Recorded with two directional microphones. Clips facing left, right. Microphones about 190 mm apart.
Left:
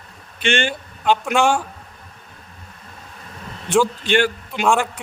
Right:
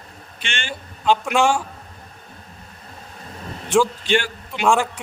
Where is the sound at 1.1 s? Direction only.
Centre (ahead or behind).